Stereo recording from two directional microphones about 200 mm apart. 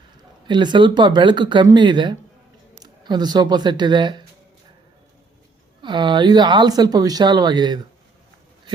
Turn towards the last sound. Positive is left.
turn(degrees=-20)  # may be behind; listen again after turning